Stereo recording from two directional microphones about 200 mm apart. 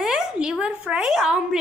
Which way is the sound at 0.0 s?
5° right (ahead or behind).